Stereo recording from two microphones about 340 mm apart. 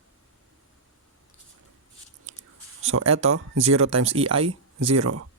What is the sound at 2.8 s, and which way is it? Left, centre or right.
Speech, right.